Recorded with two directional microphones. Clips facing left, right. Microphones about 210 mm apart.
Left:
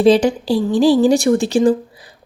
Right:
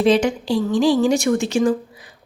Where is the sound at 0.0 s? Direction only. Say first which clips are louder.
Left 4 dB; 35° left (ahead or behind).